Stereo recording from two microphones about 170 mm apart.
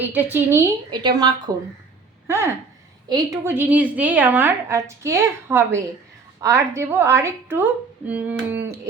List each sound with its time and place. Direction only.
0.0 s a woman's voice: 10° right (ahead or behind)
0.9 s a woman's voice: 25° right (ahead or behind)
2.2 s a woman's voice: 15° right (ahead or behind)